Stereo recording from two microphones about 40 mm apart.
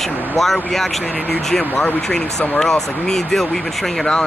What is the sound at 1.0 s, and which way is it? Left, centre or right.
Speech, left.